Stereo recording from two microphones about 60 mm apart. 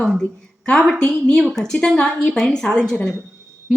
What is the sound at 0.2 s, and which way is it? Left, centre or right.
A woman's voice, centre.